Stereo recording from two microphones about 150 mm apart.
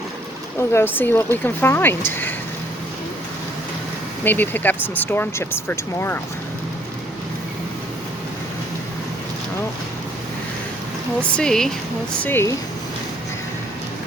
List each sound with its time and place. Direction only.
0.7 s speech: 15° left (ahead or behind)
4.2 s speech: 15° left (ahead or behind)
11.2 s speech: 5° left (ahead or behind)
12.2 s speech: 15° left (ahead or behind)